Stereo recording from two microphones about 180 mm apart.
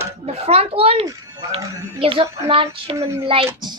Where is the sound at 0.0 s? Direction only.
35° right (ahead or behind).